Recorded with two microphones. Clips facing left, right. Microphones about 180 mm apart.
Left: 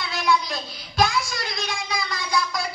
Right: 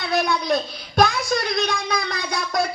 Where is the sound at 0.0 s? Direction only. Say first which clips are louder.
Right 2 dB; 45° right (ahead or behind).